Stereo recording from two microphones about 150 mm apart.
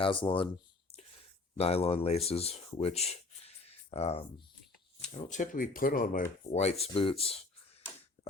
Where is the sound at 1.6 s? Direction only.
40° left (ahead or behind).